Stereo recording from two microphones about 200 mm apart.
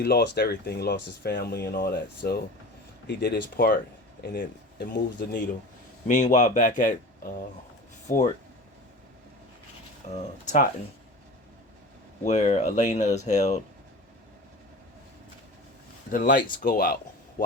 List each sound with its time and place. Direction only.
0.0 s speech: 55° left (ahead or behind)
10.0 s speech: 35° left (ahead or behind)
12.2 s speech: 35° left (ahead or behind)
16.1 s speech: 45° left (ahead or behind)